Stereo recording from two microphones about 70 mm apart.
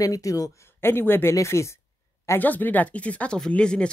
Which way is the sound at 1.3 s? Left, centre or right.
Left.